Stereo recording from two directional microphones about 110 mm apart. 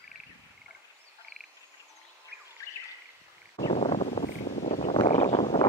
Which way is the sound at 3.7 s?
85° left.